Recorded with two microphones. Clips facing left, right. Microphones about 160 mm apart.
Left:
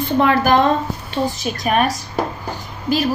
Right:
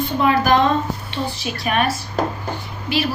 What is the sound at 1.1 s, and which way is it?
Speech, 40° left (ahead or behind).